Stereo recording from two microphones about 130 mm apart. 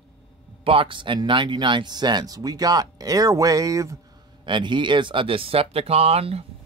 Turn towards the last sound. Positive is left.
turn(degrees=-50)  # may be behind; listen again after turning